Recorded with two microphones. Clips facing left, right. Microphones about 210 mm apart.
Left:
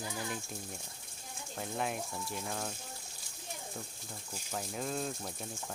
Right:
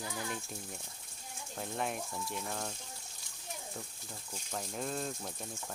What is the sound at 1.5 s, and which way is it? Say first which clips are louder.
Speech: left 1 dB; centre (ahead or behind).